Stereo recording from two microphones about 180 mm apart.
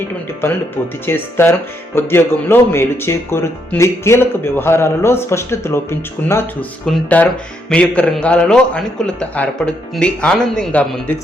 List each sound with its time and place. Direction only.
1.0 s a man's voice: 10° left (ahead or behind)